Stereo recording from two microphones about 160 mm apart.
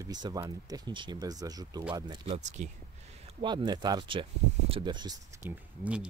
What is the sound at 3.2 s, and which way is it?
Speech, 30° right (ahead or behind).